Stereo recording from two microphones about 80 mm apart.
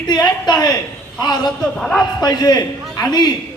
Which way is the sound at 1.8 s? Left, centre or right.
Centre.